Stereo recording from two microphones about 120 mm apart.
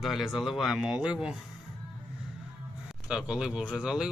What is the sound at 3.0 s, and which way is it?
Speech, 5° right (ahead or behind).